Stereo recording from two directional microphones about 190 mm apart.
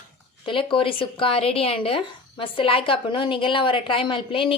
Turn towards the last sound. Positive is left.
turn(degrees=25)  # may be behind; listen again after turning